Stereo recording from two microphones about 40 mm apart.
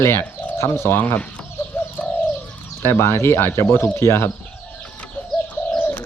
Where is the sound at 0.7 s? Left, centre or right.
Left.